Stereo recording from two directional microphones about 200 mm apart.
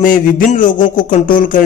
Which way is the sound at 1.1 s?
40° left (ahead or behind).